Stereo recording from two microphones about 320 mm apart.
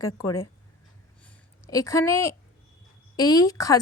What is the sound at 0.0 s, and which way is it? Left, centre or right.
Speech, centre.